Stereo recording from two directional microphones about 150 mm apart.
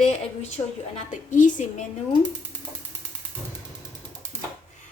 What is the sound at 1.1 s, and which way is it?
Speech, 55° left (ahead or behind).